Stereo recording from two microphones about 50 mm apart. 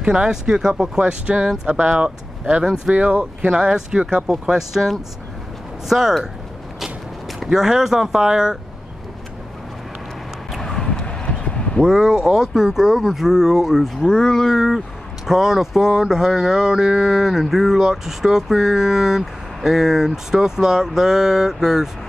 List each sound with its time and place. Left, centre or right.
0.0 s speech: centre
2.6 s speech: centre
2.9 s speech: right
4.3 s speech: centre
7.3 s speech: centre
10.6 s a sound: centre
11.8 s speech: centre
14.0 s speech: centre
14.5 s speech: centre